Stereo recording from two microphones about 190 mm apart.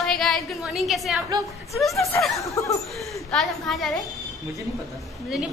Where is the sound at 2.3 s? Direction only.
15° left (ahead or behind).